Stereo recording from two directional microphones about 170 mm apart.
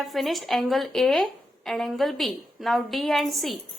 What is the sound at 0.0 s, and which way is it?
A woman's voice, centre (ahead or behind).